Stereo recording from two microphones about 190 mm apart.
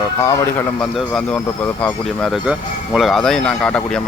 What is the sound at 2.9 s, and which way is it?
Speech, centre (ahead or behind).